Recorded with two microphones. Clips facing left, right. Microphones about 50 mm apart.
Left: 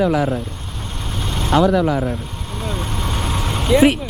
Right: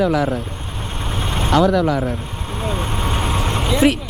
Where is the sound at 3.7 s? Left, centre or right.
Centre.